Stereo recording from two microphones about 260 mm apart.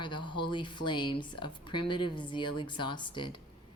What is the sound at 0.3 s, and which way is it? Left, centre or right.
A woman's voice, centre.